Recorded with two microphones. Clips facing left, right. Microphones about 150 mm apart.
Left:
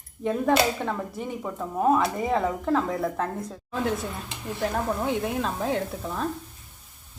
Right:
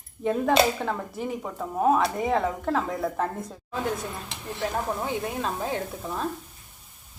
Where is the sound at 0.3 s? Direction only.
Centre (ahead or behind).